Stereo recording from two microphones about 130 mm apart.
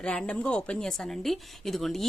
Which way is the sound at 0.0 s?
5° left (ahead or behind).